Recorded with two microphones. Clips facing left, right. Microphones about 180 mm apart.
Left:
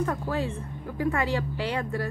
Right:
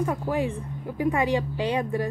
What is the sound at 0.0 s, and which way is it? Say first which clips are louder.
A woman's voice: right 2 dB; 15° right (ahead or behind).